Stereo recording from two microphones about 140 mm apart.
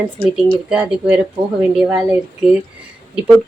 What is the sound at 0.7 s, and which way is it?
Speech, 5° right (ahead or behind).